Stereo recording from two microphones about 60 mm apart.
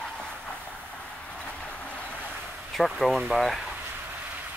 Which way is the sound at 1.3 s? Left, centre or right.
Centre.